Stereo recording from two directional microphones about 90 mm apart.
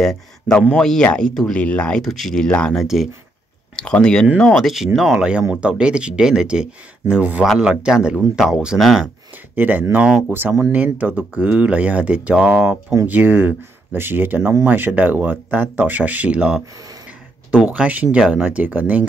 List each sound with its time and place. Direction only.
0.5 s speech: 10° left (ahead or behind)
2.0 s speech: centre (ahead or behind)
2.7 s speech: 5° right (ahead or behind)
3.7 s speech: 10° left (ahead or behind)
4.6 s speech: centre (ahead or behind)
9.6 s speech: 20° right (ahead or behind)
10.0 s speech: 5° right (ahead or behind)
10.7 s speech: 15° right (ahead or behind)